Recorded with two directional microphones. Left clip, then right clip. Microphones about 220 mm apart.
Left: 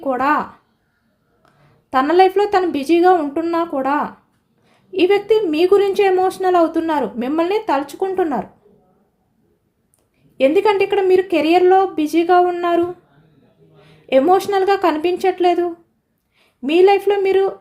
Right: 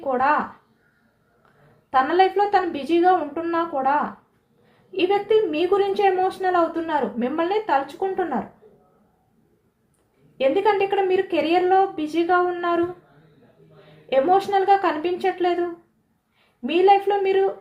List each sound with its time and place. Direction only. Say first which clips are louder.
0.1 s a woman's voice: left 3 dB; 55° left (ahead or behind)
1.9 s a woman's voice: left 5 dB; 55° left (ahead or behind)
10.3 s a woman's voice: left 5 dB; 55° left (ahead or behind)
14.1 s a woman's voice: left 4 dB; 55° left (ahead or behind)
16.6 s a woman's voice: left 4 dB; 55° left (ahead or behind)